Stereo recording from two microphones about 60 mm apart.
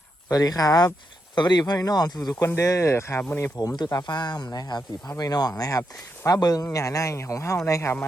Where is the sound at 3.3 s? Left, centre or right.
Left.